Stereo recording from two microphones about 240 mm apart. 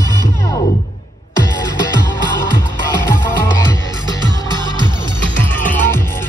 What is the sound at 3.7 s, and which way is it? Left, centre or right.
Music, centre.